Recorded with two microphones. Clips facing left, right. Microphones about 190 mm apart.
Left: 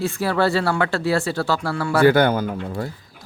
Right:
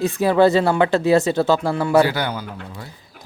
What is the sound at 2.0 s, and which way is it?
Speech, 50° left (ahead or behind).